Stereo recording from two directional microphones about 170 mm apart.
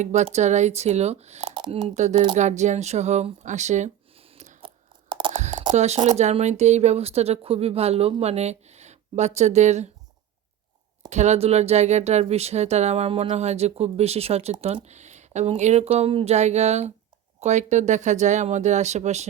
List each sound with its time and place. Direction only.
0.0 s speech: 40° right (ahead or behind); by 1.9 s 25° right (ahead or behind)
2.0 s speech: 45° right (ahead or behind)
5.0 s a sound: 30° right (ahead or behind)
5.3 s a sound: 45° right (ahead or behind)
5.7 s speech: 40° right (ahead or behind)
11.1 s speech: 40° right (ahead or behind)